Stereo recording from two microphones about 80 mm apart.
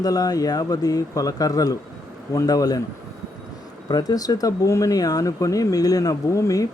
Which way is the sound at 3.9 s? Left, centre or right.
Left.